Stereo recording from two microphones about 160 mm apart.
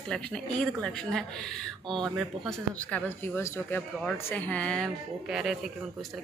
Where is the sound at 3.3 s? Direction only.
15° left (ahead or behind).